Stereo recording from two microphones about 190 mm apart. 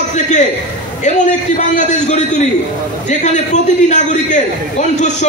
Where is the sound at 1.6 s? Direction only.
40° left (ahead or behind).